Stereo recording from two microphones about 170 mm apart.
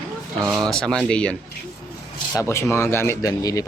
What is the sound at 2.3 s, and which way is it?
Speech, 15° left (ahead or behind).